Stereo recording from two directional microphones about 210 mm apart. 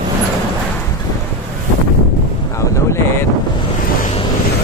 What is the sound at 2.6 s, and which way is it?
Wind noise, 15° left (ahead or behind).